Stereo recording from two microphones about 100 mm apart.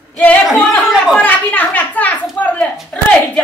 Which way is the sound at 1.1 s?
15° left (ahead or behind).